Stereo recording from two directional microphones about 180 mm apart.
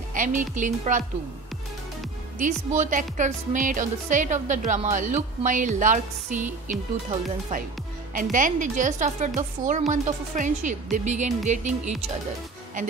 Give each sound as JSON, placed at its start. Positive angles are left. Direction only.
{"t": 0.1, "sound": "speech", "side_deg": -45}
{"t": 2.3, "sound": "speech", "side_deg": -45}